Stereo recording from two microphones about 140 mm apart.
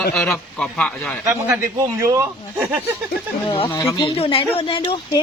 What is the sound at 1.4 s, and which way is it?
Speech, 20° right (ahead or behind).